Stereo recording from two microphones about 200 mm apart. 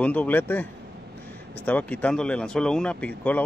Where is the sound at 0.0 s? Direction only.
5° left (ahead or behind).